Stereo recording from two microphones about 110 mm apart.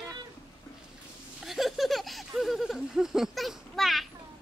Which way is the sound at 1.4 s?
Centre (ahead or behind).